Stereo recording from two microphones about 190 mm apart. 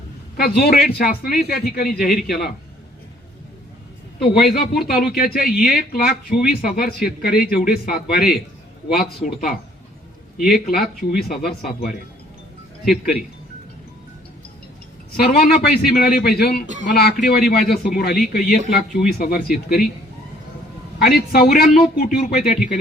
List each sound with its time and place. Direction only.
0.3 s a man's voice: 55° left (ahead or behind)
4.2 s a man's voice: 55° left (ahead or behind)
15.1 s a man's voice: 50° left (ahead or behind)
21.0 s a man's voice: 55° left (ahead or behind)